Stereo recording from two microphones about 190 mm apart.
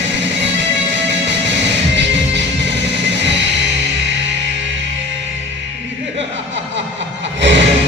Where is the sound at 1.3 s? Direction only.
70° right (ahead or behind).